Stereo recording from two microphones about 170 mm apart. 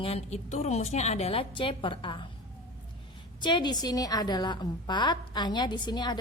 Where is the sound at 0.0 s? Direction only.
35° left (ahead or behind).